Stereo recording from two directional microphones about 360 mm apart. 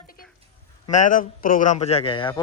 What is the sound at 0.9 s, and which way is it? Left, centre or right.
A man's voice, left.